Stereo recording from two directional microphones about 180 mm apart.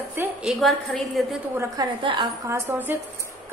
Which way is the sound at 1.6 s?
25° right (ahead or behind).